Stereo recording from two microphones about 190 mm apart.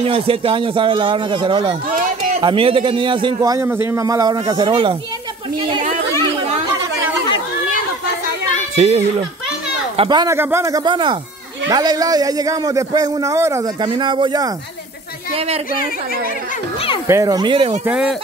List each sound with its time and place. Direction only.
0.0 s a man's voice: 30° right (ahead or behind)
8.7 s a child's voice: 35° right (ahead or behind)
9.9 s a man's voice: 25° right (ahead or behind)
13.8 s a man's voice: 25° right (ahead or behind)
15.3 s a woman's voice: 35° right (ahead or behind)
17.1 s a man's voice: 20° right (ahead or behind)
17.8 s speech: 5° right (ahead or behind)